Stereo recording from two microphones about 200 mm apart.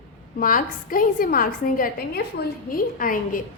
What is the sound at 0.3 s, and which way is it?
A woman's voice, 45° left (ahead or behind).